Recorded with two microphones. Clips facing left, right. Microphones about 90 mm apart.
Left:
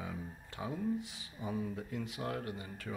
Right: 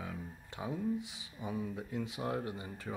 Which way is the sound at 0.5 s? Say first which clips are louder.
Even; 10° right (ahead or behind).